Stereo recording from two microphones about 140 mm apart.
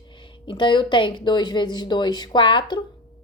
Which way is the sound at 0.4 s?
35° left (ahead or behind).